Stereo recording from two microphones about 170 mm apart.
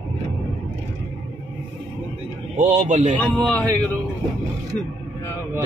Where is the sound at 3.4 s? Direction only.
10° left (ahead or behind).